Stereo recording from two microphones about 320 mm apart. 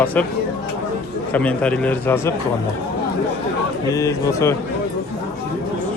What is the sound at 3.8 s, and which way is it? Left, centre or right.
Speech, centre.